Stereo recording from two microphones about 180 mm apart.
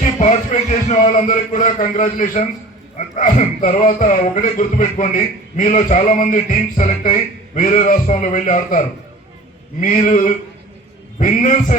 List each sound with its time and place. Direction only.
0.0 s speech: 45° left (ahead or behind)
9.8 s speech: 45° left (ahead or behind)